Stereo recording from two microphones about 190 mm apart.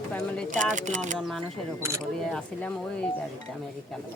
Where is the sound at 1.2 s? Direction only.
Centre (ahead or behind).